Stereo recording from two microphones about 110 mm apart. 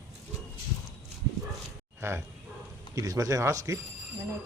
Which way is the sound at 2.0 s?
25° right (ahead or behind).